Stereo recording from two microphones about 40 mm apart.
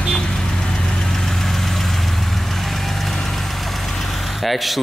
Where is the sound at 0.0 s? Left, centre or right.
Centre.